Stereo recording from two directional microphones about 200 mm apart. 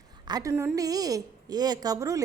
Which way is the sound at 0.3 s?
20° right (ahead or behind).